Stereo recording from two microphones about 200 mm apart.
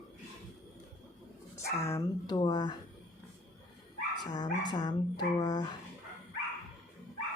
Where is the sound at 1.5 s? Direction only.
15° left (ahead or behind).